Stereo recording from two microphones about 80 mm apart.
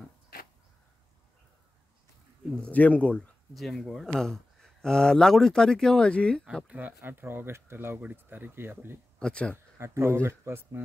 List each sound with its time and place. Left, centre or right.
2.5 s speech: centre
3.5 s speech: centre
6.7 s speech: right
9.2 s speech: centre
9.8 s speech: right